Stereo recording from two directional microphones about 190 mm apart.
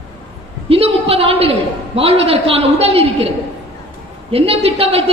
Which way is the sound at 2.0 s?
30° right (ahead or behind).